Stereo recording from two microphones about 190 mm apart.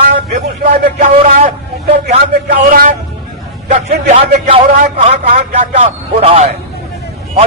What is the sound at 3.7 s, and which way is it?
A man's voice, 40° right (ahead or behind).